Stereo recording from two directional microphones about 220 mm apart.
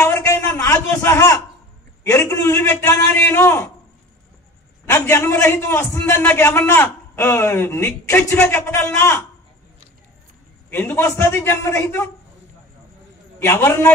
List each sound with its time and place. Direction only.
0.0 s a sound: 15° left (ahead or behind)
2.0 s a man's voice: 15° left (ahead or behind)
4.8 s a man's voice: 10° left (ahead or behind)
10.7 s a man's voice: 10° left (ahead or behind)
13.4 s a man's voice: 15° left (ahead or behind)